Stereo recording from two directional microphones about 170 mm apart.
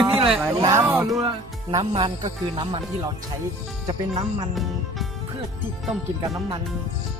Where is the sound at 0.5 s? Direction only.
20° right (ahead or behind).